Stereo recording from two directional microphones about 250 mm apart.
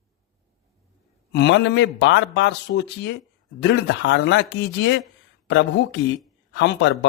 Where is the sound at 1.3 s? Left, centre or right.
Left.